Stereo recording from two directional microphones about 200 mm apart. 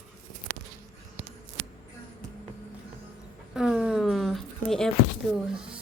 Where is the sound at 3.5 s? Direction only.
Centre (ahead or behind).